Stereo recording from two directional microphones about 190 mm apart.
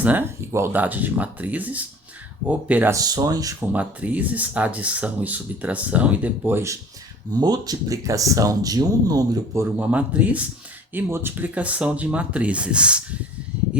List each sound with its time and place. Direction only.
0.0 s speech: 10° right (ahead or behind)
3.7 s speech: 10° right (ahead or behind)
9.7 s speech: 10° right (ahead or behind)